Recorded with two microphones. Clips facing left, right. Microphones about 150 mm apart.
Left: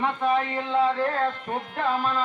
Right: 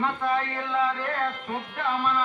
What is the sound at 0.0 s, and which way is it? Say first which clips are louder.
Music: left 2 dB; 20° left (ahead or behind).